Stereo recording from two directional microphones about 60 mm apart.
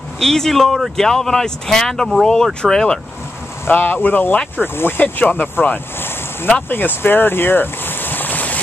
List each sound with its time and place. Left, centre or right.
0.2 s speech: centre
3.6 s speech: left